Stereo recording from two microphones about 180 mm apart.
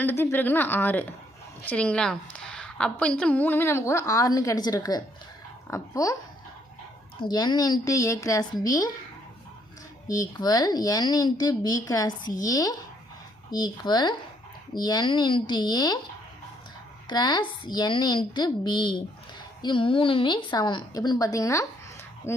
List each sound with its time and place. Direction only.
0.0 s a woman's voice: 15° left (ahead or behind)
7.2 s speech: 25° left (ahead or behind)
10.1 s speech: 20° left (ahead or behind)
17.1 s a woman's voice: 25° left (ahead or behind)